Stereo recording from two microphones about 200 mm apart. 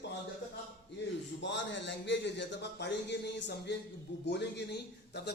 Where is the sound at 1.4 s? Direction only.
60° left (ahead or behind).